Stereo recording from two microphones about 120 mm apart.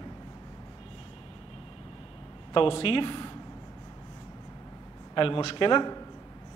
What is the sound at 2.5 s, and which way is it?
Speech, 50° left (ahead or behind).